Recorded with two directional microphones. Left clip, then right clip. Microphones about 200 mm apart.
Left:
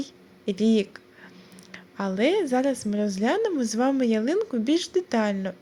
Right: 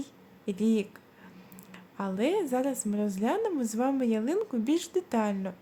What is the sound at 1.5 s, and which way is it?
A woman's voice, 15° left (ahead or behind).